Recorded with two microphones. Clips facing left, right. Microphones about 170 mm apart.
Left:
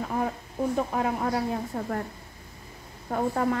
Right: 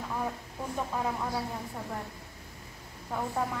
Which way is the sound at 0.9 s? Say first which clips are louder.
Left 5 dB; 75° left (ahead or behind).